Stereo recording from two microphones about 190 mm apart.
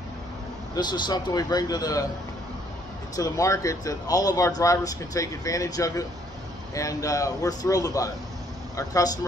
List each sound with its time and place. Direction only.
0.7 s speech: 20° left (ahead or behind)
3.2 s speech: 15° left (ahead or behind)